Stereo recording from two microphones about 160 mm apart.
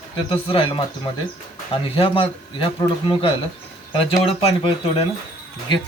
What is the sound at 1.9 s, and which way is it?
Speech, 35° left (ahead or behind).